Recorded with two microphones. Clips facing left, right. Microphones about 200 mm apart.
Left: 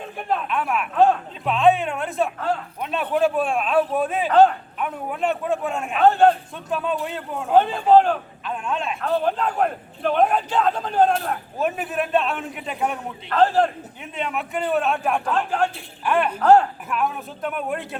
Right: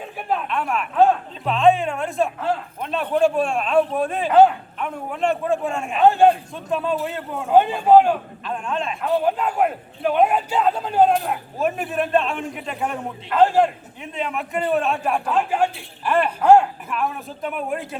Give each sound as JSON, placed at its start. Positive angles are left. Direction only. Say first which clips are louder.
{"t": 0.3, "sound": "a man's voice", "louder": "even", "side_deg": 5}
{"t": 4.3, "sound": "a man's voice", "louder": "right 2 dB", "side_deg": -10}
{"t": 4.8, "sound": "a man's voice", "louder": "right 1 dB", "side_deg": 0}
{"t": 6.1, "sound": "a man's voice", "louder": "right 1 dB", "side_deg": -10}
{"t": 6.5, "sound": "a man's voice", "louder": "right 2 dB", "side_deg": 0}
{"t": 7.5, "sound": "a man's voice", "louder": "right 2 dB", "side_deg": -10}
{"t": 8.5, "sound": "a man's voice", "louder": "right 1 dB", "side_deg": 0}
{"t": 13.3, "sound": "a man's voice", "louder": "right 2 dB", "side_deg": -10}
{"t": 14.0, "sound": "a man's voice", "louder": "right 1 dB", "side_deg": 0}
{"t": 16.4, "sound": "a man's voice", "louder": "right 2 dB", "side_deg": -10}
{"t": 16.9, "sound": "a man's voice", "louder": "left 2 dB", "side_deg": 0}